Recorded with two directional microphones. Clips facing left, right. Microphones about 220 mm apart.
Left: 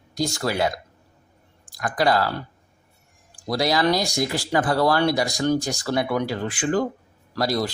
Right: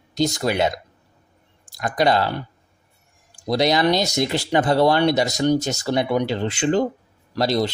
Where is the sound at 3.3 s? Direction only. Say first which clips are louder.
Right 3 dB; 20° right (ahead or behind).